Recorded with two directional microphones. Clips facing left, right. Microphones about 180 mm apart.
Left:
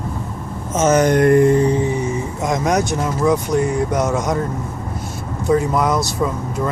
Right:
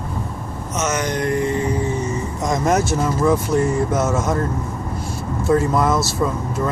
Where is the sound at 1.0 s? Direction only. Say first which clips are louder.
Left 10 dB; 55° left (ahead or behind).